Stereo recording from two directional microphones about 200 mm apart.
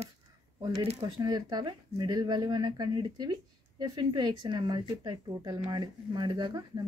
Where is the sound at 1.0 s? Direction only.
20° right (ahead or behind).